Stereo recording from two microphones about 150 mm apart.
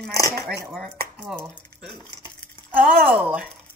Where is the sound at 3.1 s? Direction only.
10° right (ahead or behind).